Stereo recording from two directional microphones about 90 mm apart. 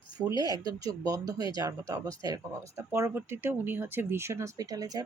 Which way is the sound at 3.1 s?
20° right (ahead or behind).